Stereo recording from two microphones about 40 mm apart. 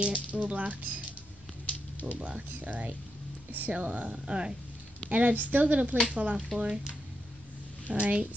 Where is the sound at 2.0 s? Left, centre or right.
Right.